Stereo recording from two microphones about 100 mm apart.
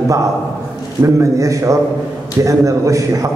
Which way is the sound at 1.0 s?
30° right (ahead or behind).